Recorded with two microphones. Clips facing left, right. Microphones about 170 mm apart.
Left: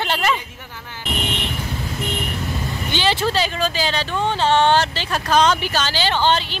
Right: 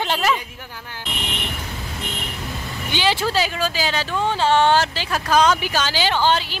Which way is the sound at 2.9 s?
10° right (ahead or behind).